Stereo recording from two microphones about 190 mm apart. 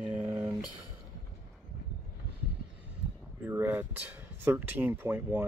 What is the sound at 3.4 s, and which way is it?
Speech, 10° right (ahead or behind).